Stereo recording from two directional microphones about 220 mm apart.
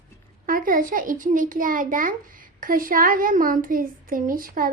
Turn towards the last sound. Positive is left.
turn(degrees=-40)  # may be behind; listen again after turning